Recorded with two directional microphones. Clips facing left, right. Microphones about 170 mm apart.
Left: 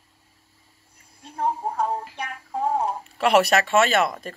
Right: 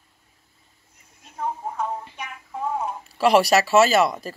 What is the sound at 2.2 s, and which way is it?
Music, 35° left (ahead or behind).